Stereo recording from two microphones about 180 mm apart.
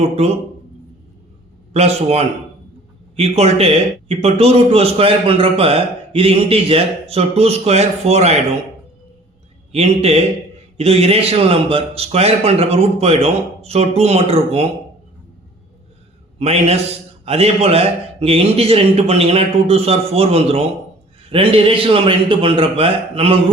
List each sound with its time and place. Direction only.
1.7 s a man's voice: 35° right (ahead or behind)
9.7 s a man's voice: 35° right (ahead or behind)
16.4 s a man's voice: 35° right (ahead or behind)